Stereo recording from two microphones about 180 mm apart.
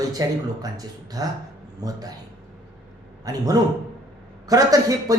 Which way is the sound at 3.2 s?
20° right (ahead or behind).